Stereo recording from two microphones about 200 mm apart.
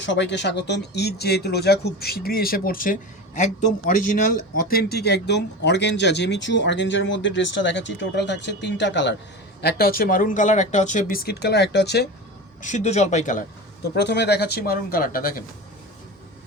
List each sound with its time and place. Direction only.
0.0 s speech: 60° left (ahead or behind); by 3.9 s 40° left (ahead or behind)
4.7 s speech: 50° left (ahead or behind)
12.6 s speech: 35° left (ahead or behind)
13.9 s speech: 55° left (ahead or behind)